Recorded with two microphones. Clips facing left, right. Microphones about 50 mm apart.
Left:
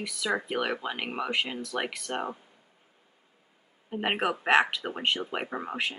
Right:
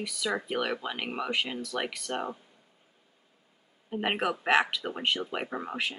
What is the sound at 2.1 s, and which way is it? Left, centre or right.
Speech, left.